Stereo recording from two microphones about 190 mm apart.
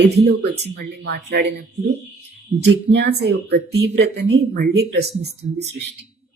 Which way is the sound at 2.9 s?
60° right (ahead or behind).